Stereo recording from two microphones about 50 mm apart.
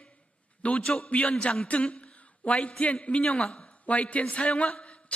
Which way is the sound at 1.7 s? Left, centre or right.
Left.